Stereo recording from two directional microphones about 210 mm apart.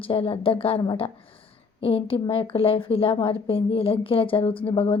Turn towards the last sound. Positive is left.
turn(degrees=25)  # may be behind; listen again after turning